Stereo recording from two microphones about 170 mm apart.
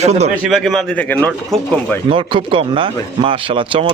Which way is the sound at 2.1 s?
30° right (ahead or behind).